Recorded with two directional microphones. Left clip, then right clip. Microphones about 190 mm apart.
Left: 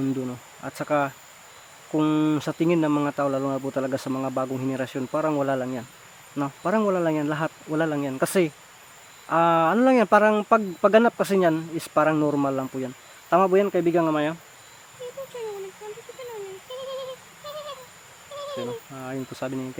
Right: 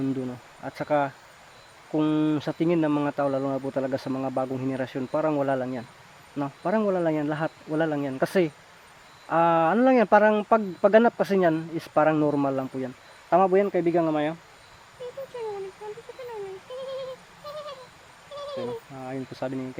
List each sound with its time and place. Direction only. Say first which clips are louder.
0.3 s speech: left 1 dB; 10° left (ahead or behind)
13.3 s speech: left 1 dB; 15° left (ahead or behind)
17.5 s a sound: left 1 dB; 25° right (ahead or behind)
18.9 s speech: left 1 dB; 15° left (ahead or behind)